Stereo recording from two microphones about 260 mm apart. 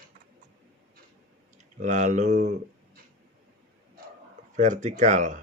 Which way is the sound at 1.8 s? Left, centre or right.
Right.